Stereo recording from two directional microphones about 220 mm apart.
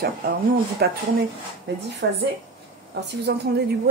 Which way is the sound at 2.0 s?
50° right (ahead or behind).